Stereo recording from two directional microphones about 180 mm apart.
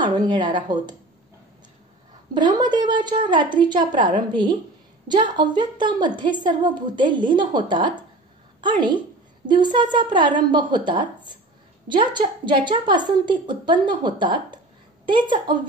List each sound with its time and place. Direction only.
0.0 s a woman's voice: 25° right (ahead or behind)
2.3 s a woman's voice: 25° right (ahead or behind)